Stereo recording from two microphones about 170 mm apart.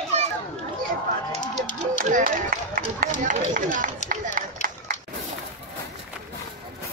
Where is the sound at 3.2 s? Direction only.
50° right (ahead or behind).